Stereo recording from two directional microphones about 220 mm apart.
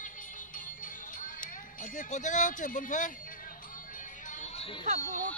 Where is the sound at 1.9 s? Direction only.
35° left (ahead or behind).